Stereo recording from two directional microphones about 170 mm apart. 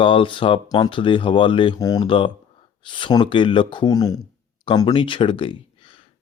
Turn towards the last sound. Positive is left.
turn(degrees=30)  # may be behind; listen again after turning